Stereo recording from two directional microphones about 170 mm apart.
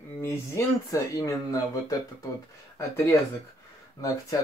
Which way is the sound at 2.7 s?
15° left (ahead or behind).